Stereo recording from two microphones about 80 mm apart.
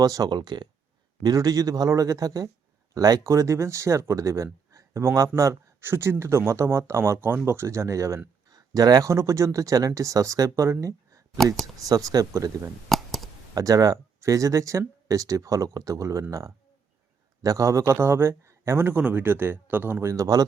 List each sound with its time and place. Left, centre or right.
0.0 s speech: right
1.2 s speech: right
8.4 s a sound: right
9.0 s speech: right
12.9 s clicking: centre
13.5 s speech: right
17.4 s speech: right